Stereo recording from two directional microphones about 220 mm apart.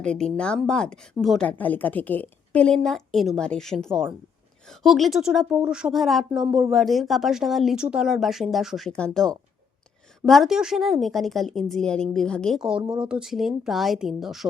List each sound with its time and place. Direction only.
0.0 s speech: 5° left (ahead or behind)
12.8 s speech: 20° right (ahead or behind)
13.1 s speech: 5° right (ahead or behind)